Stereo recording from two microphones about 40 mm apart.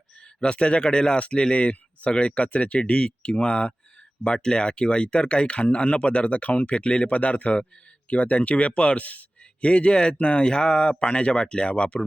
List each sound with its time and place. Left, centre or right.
0.3 s speech: left